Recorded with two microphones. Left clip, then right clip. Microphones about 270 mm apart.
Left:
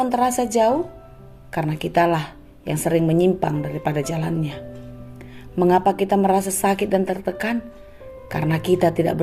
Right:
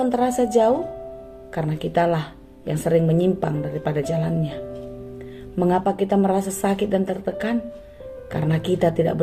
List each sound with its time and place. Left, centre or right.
0.0 s a woman's voice: left
5.6 s a woman's voice: left